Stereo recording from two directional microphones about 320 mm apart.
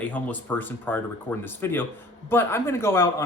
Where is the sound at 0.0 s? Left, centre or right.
Centre.